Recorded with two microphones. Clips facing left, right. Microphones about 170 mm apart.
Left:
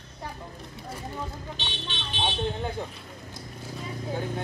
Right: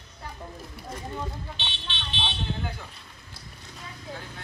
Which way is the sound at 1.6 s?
40° left (ahead or behind).